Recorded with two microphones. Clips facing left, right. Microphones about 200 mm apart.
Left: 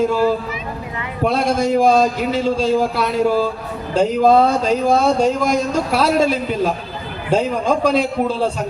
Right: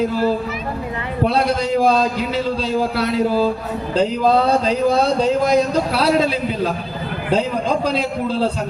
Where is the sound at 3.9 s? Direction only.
50° left (ahead or behind).